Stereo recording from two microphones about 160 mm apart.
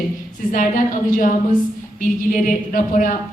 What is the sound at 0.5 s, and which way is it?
Speech, 55° left (ahead or behind).